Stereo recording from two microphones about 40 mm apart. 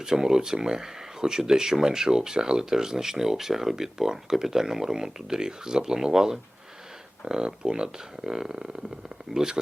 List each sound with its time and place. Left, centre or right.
0.0 s speech: centre